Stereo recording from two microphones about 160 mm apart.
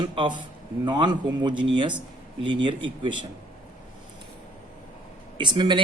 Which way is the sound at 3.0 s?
30° right (ahead or behind).